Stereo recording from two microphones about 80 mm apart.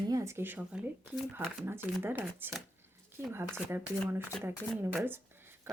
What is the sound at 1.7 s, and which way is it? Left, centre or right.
Speech, right.